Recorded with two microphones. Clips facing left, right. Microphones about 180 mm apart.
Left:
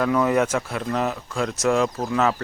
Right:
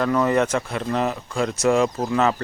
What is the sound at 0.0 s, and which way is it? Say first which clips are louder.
Speech: even; 5° left (ahead or behind).